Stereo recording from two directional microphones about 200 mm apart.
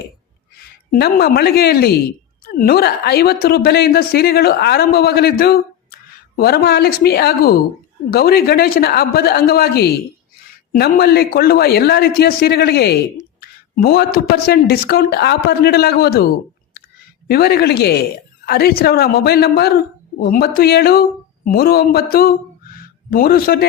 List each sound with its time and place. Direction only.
0.9 s a man's voice: 50° left (ahead or behind)